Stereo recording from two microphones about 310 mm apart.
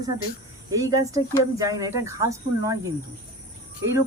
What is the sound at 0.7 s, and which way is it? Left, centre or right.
Speech, centre.